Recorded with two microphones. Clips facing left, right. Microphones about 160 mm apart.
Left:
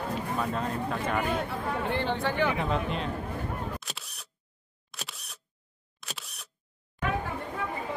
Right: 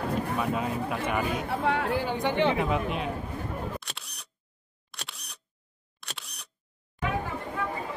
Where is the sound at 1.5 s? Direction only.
80° right.